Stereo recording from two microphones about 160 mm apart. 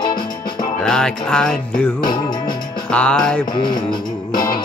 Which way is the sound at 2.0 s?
25° left (ahead or behind).